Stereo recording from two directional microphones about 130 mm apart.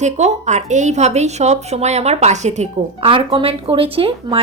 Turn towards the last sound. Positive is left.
turn(degrees=-45)  # may be behind; listen again after turning